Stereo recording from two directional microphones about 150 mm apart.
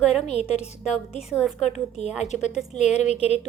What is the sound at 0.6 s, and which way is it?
Speech, 50° left (ahead or behind).